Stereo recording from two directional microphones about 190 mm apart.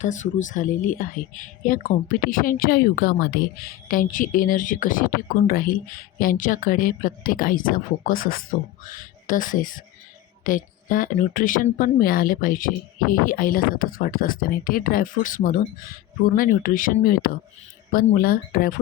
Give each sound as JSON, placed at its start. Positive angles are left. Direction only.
{"t": 0.0, "sound": "speech", "side_deg": 40}